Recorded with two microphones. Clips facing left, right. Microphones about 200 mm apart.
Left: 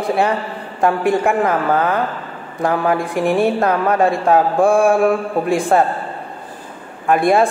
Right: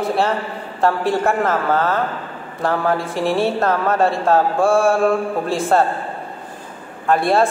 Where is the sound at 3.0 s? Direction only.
15° left (ahead or behind).